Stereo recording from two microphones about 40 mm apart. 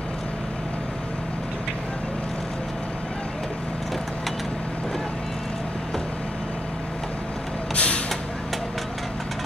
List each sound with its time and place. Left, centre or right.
7.7 s vehicle: left